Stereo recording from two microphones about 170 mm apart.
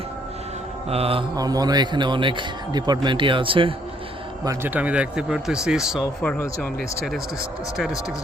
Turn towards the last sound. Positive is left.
turn(degrees=10)  # may be behind; listen again after turning